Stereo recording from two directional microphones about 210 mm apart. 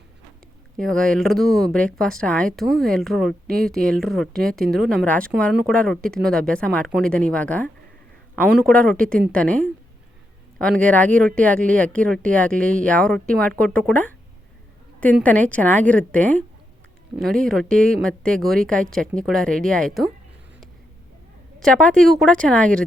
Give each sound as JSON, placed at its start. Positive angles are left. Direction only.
{"t": 0.8, "sound": "speech", "side_deg": 5}
{"t": 15.2, "sound": "a woman's voice", "side_deg": 5}
{"t": 21.6, "sound": "speech", "side_deg": 5}